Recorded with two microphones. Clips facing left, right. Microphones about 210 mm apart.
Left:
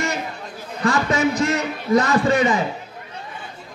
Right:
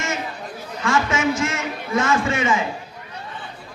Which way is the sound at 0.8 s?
35° left (ahead or behind).